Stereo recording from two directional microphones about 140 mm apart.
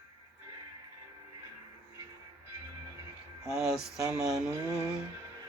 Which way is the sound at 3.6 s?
5° right (ahead or behind).